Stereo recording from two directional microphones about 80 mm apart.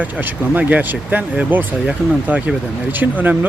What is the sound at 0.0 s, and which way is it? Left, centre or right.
Speech, right.